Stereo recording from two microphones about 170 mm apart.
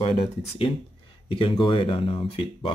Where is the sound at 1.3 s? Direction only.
30° left (ahead or behind).